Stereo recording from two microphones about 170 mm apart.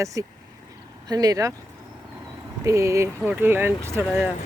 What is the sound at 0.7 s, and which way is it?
Vehicle, 20° right (ahead or behind).